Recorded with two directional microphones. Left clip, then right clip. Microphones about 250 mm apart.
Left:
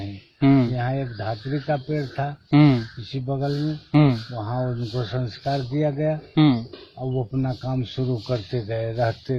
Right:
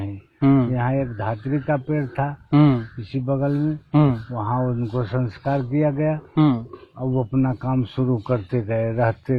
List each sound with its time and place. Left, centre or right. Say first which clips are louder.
0.3 s a sound: even; centre
0.7 s speech: right 4 dB; right
2.5 s speech: even; centre
3.1 s speech: right 4 dB; right
3.9 s speech: even; centre
4.4 s speech: right 4 dB; right
6.3 s speech: left 1 dB; centre
7.3 s speech: right 5 dB; right